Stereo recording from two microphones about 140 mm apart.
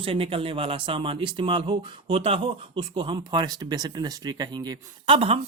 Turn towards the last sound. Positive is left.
turn(degrees=-40)  # may be behind; listen again after turning